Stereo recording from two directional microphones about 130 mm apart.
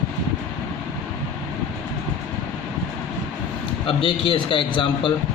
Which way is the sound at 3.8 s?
40° left (ahead or behind).